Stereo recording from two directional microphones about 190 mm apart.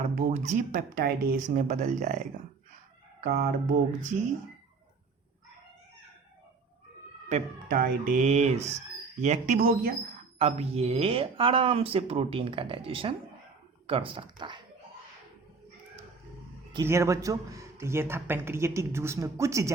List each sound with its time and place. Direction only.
0.2 s speech: 40° right (ahead or behind)
3.2 s speech: 50° right (ahead or behind)
7.3 s speech: 45° right (ahead or behind)
10.3 s speech: 35° right (ahead or behind)
16.7 s speech: 15° right (ahead or behind)